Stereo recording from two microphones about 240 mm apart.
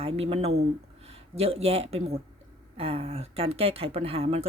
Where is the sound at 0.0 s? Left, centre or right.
Right.